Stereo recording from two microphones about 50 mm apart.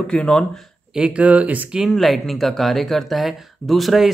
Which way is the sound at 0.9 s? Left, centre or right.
Right.